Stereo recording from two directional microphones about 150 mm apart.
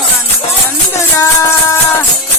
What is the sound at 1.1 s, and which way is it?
Music, 20° left (ahead or behind).